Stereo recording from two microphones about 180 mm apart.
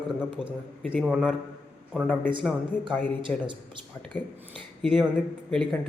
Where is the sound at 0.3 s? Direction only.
5° right (ahead or behind).